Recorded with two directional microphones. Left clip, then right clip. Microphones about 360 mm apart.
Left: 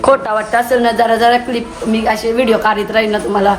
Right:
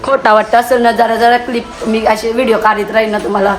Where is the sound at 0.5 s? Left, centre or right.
Centre.